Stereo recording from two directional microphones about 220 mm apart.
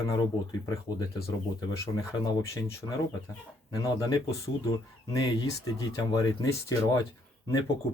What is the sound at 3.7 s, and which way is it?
Speech, 15° left (ahead or behind).